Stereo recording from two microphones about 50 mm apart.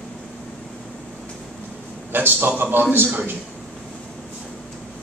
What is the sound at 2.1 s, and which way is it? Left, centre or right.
Speech, right.